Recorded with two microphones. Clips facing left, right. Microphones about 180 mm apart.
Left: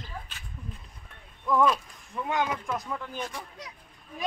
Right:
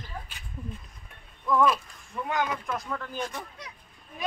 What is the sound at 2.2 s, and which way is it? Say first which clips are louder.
Speech: left 1 dB; 20° left (ahead or behind).